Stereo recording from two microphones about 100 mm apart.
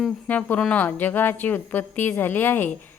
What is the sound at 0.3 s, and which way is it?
A woman's voice, 15° left (ahead or behind).